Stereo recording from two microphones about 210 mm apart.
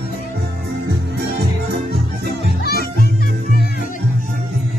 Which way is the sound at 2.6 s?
45° left (ahead or behind).